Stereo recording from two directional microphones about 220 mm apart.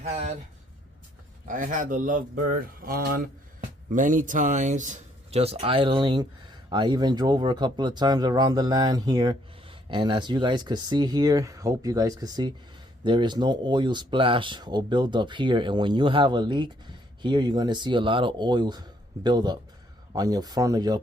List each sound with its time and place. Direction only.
0.0 s speech: 30° right (ahead or behind)
1.5 s speech: 35° right (ahead or behind); by 21.0 s 15° right (ahead or behind)